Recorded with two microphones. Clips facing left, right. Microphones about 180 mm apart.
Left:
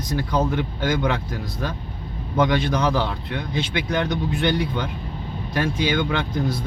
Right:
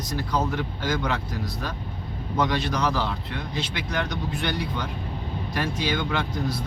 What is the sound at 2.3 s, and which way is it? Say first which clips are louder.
A man's voice: left 5 dB; 55° left (ahead or behind).